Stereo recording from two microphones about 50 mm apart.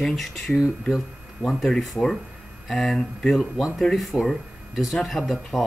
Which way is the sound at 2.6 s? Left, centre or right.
Centre.